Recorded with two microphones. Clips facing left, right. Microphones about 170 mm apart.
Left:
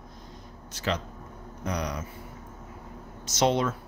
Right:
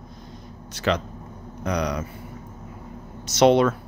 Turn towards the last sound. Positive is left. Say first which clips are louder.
# right 8 dB
turn(degrees=-70)  # may be behind; listen again after turning